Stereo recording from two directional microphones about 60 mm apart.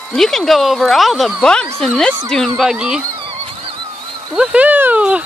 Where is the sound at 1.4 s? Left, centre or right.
Centre.